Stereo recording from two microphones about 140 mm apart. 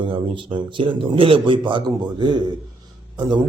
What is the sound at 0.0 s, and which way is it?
A man's voice, 35° right (ahead or behind).